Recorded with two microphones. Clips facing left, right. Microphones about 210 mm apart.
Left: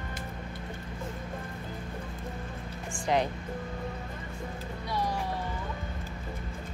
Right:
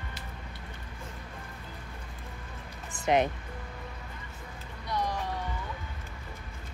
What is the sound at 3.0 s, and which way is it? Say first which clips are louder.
Speech: right 2 dB; 20° right (ahead or behind).